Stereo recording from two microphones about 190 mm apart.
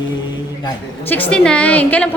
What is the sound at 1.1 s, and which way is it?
A woman's voice, 10° left (ahead or behind).